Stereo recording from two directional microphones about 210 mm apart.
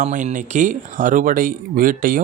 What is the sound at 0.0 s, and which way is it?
Speech, 35° right (ahead or behind).